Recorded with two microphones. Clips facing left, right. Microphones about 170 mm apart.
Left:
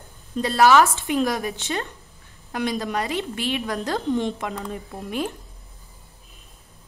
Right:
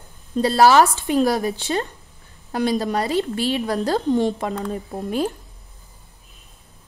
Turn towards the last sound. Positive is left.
turn(degrees=-35)  # may be behind; listen again after turning